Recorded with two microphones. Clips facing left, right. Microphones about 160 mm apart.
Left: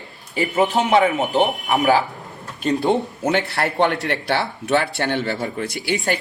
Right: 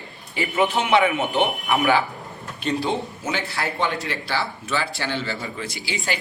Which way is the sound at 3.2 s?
60° left (ahead or behind).